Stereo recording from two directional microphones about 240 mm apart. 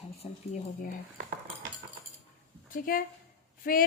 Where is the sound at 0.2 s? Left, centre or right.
Left.